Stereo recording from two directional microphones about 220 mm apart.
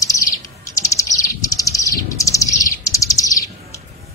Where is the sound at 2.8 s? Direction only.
15° left (ahead or behind).